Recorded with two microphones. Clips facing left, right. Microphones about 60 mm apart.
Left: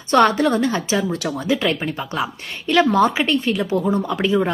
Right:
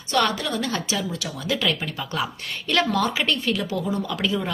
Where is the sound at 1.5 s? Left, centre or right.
Left.